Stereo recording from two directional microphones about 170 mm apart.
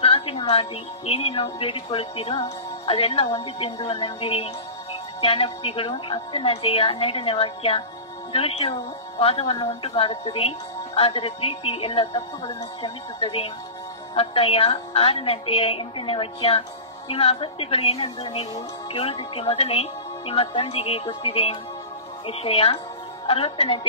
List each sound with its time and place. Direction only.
0.0 s music: 35° left (ahead or behind)
0.5 s a woman's voice: 35° left (ahead or behind)